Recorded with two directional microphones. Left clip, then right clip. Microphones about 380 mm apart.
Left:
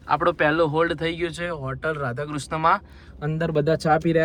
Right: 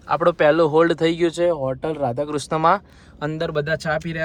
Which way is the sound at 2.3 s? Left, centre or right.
Centre.